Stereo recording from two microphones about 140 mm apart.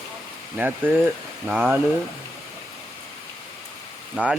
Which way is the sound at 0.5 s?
10° right (ahead or behind).